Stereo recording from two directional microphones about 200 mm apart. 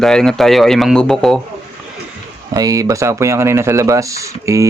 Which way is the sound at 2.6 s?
20° right (ahead or behind).